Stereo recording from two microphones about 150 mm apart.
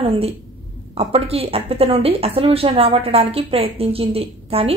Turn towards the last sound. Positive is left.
turn(degrees=-40)  # may be behind; listen again after turning